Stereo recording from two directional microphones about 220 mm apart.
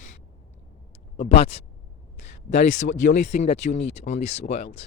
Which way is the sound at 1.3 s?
25° left (ahead or behind).